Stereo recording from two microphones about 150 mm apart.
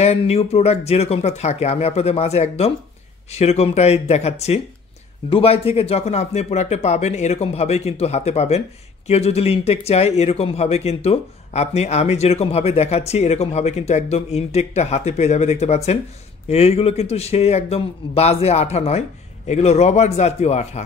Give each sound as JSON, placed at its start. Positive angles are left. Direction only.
{"t": 0.0, "sound": "speech", "side_deg": 45}